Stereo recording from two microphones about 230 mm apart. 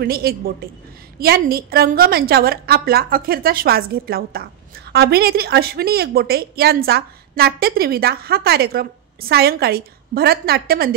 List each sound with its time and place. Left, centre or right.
0.0 s a woman's voice: right